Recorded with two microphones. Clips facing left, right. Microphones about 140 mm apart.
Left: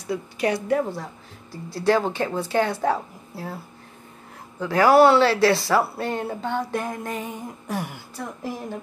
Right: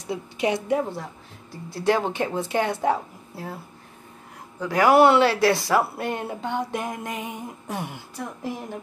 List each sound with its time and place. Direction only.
0.0 s speech: 20° right (ahead or behind)
4.6 s speech: 15° right (ahead or behind)